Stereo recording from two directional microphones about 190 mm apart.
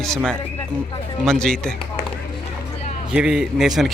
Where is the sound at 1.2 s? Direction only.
5° left (ahead or behind).